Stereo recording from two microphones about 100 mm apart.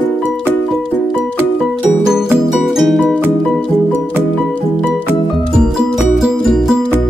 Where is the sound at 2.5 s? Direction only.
Centre (ahead or behind).